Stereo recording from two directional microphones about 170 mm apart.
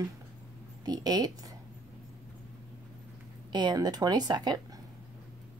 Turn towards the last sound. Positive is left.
turn(degrees=-25)  # may be behind; listen again after turning